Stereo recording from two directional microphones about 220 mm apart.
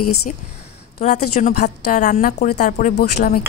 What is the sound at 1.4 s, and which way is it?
A woman's voice, 35° left (ahead or behind).